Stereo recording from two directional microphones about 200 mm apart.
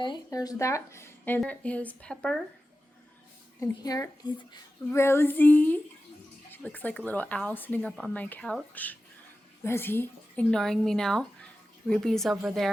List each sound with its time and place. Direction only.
0.0 s speech: 20° left (ahead or behind); by 2.4 s 5° left (ahead or behind)
3.6 s a woman's voice: 15° left (ahead or behind); by 12.7 s centre (ahead or behind)